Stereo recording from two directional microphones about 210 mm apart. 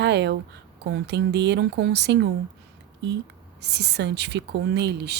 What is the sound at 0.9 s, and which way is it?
A woman's voice, 55° right (ahead or behind).